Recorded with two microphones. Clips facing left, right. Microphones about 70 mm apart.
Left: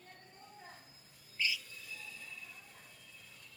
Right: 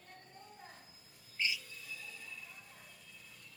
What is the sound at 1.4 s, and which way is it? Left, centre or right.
Music, right.